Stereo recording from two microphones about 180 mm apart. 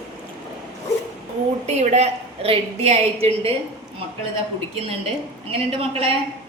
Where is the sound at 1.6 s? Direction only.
40° right (ahead or behind).